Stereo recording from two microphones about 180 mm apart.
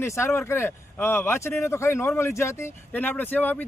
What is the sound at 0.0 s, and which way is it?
Speech, 15° left (ahead or behind).